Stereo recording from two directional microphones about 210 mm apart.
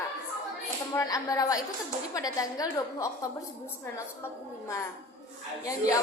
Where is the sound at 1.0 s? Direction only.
15° left (ahead or behind).